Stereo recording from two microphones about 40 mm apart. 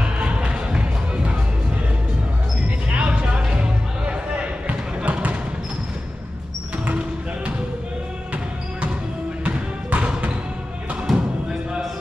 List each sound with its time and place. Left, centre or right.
0.2 s music: right
2.9 s a sound: right
3.4 s basketball bounce: right
9.4 s music: right
11.1 s music: centre